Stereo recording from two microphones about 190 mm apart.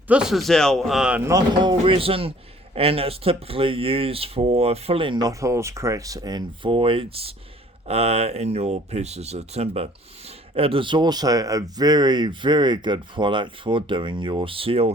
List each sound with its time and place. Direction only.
0.1 s a man's voice: 5° right (ahead or behind); by 1.7 s 20° right (ahead or behind)
1.8 s speech: 30° right (ahead or behind)